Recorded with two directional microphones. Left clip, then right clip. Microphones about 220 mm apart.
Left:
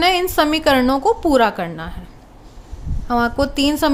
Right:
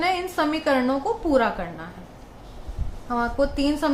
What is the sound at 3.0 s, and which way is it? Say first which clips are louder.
Speech: left 5 dB; 45° left (ahead or behind).